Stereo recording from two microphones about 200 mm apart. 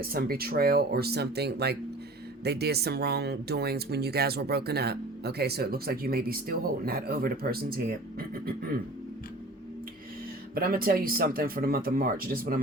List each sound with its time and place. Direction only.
0.0 s speech: 50° right (ahead or behind)
10.5 s speech: 45° right (ahead or behind)